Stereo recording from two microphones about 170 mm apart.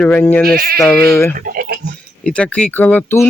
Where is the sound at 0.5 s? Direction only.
60° right (ahead or behind).